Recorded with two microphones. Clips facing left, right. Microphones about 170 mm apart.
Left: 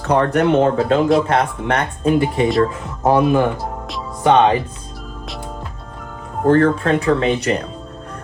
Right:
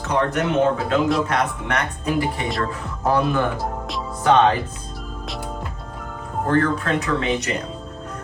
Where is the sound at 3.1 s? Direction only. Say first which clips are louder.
Left 6 dB; 20° left (ahead or behind).